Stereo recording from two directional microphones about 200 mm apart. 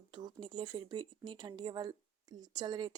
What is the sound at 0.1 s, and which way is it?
Speech, 25° right (ahead or behind).